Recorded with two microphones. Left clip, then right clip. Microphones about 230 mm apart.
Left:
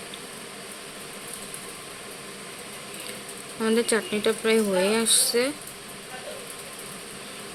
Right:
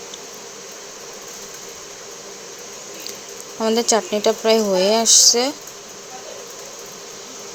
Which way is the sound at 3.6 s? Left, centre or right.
Centre.